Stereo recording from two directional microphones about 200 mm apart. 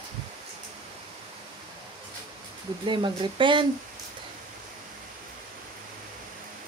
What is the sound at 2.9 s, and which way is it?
Speech, 25° right (ahead or behind).